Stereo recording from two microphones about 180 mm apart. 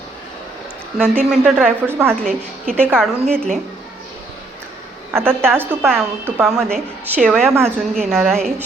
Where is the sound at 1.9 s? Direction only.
15° right (ahead or behind).